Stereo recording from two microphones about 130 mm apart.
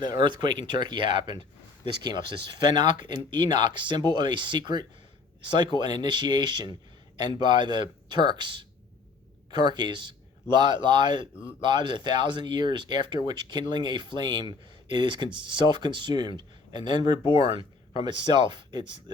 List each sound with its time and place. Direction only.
0.2 s speech: 35° right (ahead or behind)